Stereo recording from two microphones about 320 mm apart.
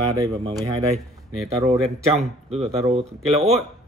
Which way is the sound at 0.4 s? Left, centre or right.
Centre.